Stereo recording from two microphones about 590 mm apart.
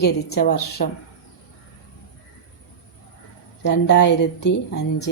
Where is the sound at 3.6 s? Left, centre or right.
Centre.